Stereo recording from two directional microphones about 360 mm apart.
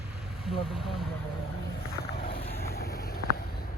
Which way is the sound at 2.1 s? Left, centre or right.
Left.